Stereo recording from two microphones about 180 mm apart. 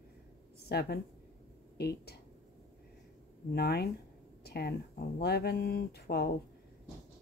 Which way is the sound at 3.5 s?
60° left (ahead or behind).